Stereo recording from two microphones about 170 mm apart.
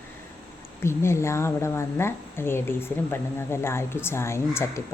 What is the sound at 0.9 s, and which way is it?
A woman's voice, 15° left (ahead or behind).